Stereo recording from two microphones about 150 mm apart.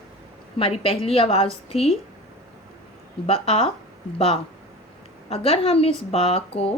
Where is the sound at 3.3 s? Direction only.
40° left (ahead or behind).